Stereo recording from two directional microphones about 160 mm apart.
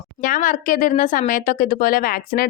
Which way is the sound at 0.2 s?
55° left (ahead or behind).